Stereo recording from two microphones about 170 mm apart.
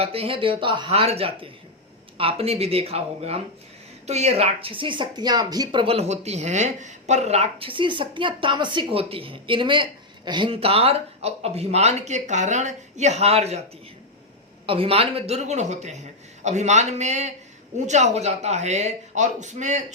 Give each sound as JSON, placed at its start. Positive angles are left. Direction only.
{"t": 0.0, "sound": "a woman's voice", "side_deg": -35}
{"t": 14.7, "sound": "a woman's voice", "side_deg": -35}